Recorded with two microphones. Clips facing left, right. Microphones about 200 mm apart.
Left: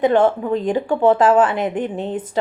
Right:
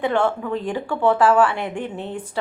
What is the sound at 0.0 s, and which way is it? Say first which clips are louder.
Speech: left 5 dB; 20° left (ahead or behind).